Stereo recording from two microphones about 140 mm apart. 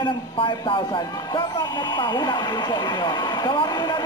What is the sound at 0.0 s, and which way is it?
A man's voice, 35° left (ahead or behind).